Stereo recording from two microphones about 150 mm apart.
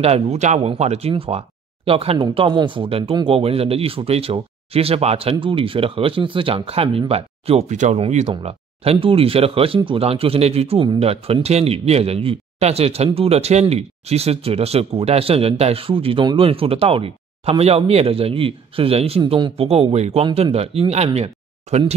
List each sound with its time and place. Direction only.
0.0 s speech: 45° right (ahead or behind)